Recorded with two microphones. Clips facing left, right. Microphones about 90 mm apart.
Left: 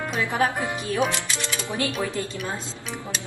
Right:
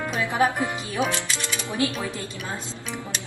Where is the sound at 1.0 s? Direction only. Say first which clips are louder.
Left 1 dB; centre (ahead or behind).